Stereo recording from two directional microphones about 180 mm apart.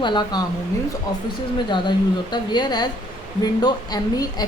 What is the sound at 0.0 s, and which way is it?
Speech, 25° left (ahead or behind).